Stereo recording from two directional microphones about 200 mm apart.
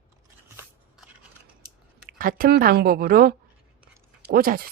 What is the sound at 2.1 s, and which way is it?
A woman's voice, 45° right (ahead or behind).